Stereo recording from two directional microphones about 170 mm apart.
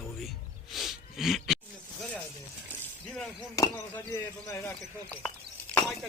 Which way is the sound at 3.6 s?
20° left (ahead or behind).